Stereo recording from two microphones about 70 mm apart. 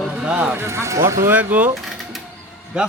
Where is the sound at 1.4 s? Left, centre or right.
Right.